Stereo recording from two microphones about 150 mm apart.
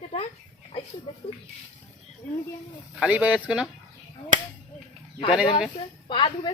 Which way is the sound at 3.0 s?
10° right (ahead or behind).